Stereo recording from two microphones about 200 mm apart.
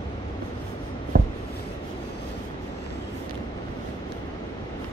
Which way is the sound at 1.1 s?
45° right (ahead or behind).